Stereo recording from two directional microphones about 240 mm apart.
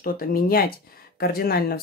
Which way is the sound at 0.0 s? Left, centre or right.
Left.